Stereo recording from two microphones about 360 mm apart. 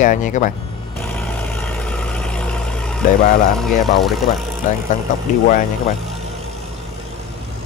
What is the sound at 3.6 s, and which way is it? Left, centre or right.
Speech, centre.